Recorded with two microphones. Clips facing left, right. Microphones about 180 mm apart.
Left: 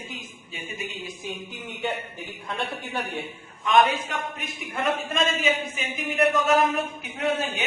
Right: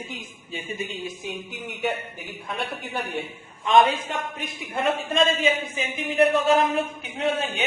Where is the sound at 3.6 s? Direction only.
30° right (ahead or behind).